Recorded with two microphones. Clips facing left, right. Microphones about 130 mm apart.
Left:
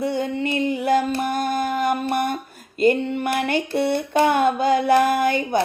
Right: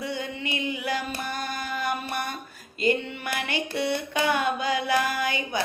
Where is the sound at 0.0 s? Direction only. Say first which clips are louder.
Left 9 dB; 45° left (ahead or behind).